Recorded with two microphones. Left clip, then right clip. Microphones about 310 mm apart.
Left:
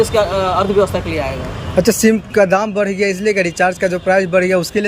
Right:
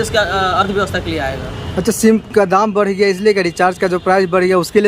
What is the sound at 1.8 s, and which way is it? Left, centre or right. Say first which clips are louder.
Speech: left 1 dB; centre.